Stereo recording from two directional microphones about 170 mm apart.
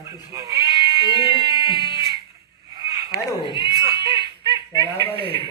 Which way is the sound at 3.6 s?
25° right (ahead or behind).